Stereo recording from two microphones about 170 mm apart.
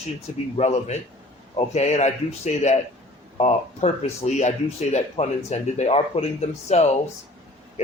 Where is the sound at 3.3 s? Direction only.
40° left (ahead or behind).